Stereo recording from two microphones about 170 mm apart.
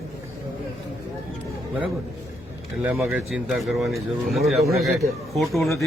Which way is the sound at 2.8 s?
10° right (ahead or behind).